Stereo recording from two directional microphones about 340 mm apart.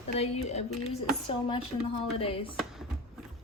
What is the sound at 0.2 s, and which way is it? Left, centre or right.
Speech, centre.